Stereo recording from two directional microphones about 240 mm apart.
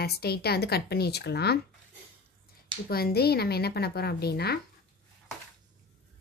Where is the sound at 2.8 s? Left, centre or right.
Left.